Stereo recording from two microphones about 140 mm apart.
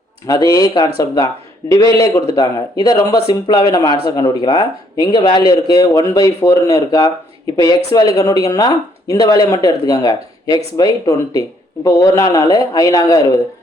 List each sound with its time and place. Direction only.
0.3 s speech: 25° left (ahead or behind)